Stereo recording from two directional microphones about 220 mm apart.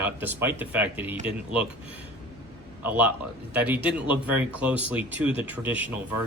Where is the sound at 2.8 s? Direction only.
10° right (ahead or behind).